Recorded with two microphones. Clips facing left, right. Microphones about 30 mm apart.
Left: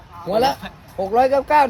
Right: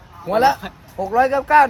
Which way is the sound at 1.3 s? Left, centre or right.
Right.